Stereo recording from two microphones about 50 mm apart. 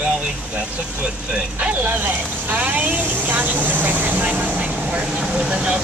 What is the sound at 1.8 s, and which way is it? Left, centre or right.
Speech, right.